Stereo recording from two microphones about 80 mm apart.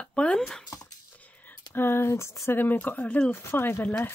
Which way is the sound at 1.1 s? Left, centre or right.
Centre.